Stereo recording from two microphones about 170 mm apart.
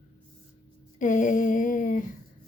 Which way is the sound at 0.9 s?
50° left (ahead or behind).